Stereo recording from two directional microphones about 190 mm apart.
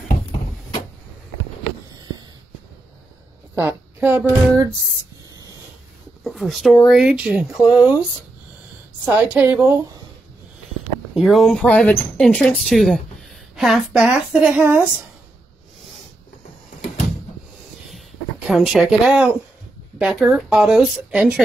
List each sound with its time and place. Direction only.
2.0 s a sound: 20° right (ahead or behind)
3.5 s speech: 10° right (ahead or behind)
6.2 s speech: centre (ahead or behind)
9.0 s a woman's voice: 10° right (ahead or behind)
11.1 s speech: centre (ahead or behind)
17.8 s a sound: centre (ahead or behind)
20.0 s speech: 5° right (ahead or behind)